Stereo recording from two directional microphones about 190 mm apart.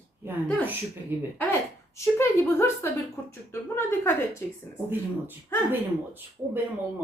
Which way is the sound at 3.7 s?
15° left (ahead or behind).